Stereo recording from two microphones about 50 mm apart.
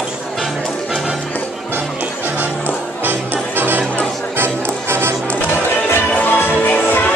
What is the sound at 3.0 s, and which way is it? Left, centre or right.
Music, right.